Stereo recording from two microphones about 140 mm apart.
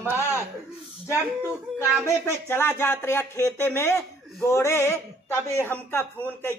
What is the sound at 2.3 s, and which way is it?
Speech, 15° left (ahead or behind).